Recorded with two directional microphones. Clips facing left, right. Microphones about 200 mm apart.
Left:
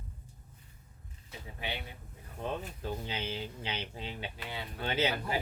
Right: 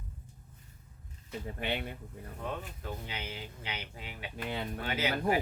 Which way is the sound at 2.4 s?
30° left (ahead or behind).